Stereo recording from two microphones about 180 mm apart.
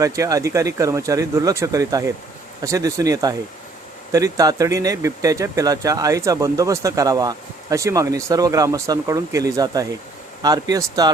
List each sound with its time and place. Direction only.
0.0 s speech: 20° right (ahead or behind)